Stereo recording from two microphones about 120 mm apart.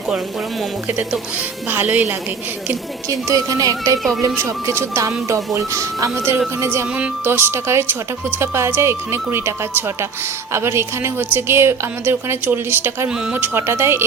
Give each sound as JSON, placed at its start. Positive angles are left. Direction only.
{"t": 0.9, "sound": "a woman's voice", "side_deg": -15}
{"t": 3.1, "sound": "a woman's voice", "side_deg": -25}
{"t": 13.1, "sound": "a woman's voice", "side_deg": -5}
{"t": 13.3, "sound": "a woman's voice", "side_deg": -15}